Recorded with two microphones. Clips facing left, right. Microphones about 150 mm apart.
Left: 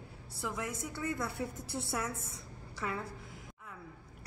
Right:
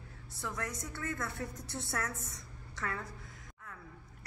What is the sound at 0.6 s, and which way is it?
Speech, 25° left (ahead or behind).